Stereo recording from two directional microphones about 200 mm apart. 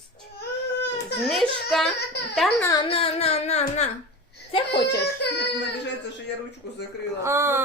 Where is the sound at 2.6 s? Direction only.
20° left (ahead or behind).